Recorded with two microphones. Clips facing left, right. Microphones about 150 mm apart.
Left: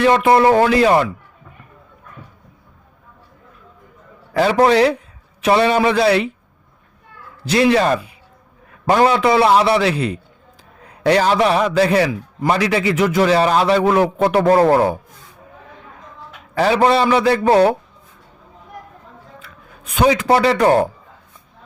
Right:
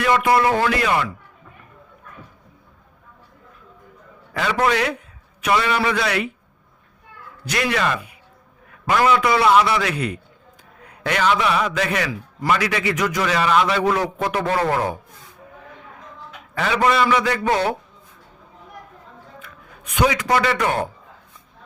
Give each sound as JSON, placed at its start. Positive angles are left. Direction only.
{"t": 0.0, "sound": "a man's voice", "side_deg": 30}
{"t": 4.4, "sound": "a man's voice", "side_deg": 35}
{"t": 7.4, "sound": "a man's voice", "side_deg": 30}
{"t": 16.6, "sound": "a man's voice", "side_deg": 35}
{"t": 19.4, "sound": "speech", "side_deg": 30}